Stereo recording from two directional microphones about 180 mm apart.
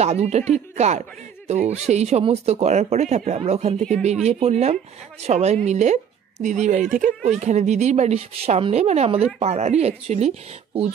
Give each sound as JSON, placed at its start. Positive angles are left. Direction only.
{"t": 0.0, "sound": "a woman's voice", "side_deg": -35}